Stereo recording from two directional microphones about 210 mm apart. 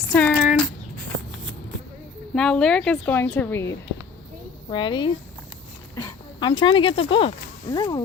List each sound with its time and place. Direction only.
0.1 s a sound: 5° left (ahead or behind)
2.3 s a woman's voice: 5° left (ahead or behind)
4.7 s speech: 20° left (ahead or behind)